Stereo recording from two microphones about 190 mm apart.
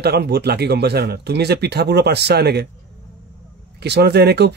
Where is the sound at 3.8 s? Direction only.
60° right (ahead or behind).